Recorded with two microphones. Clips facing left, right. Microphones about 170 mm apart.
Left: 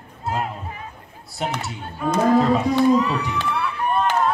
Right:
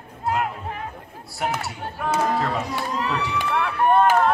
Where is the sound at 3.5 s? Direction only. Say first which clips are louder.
Right 6 dB; 60° right (ahead or behind).